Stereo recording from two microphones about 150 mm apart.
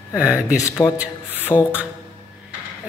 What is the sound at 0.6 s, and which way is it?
Speech, 15° left (ahead or behind).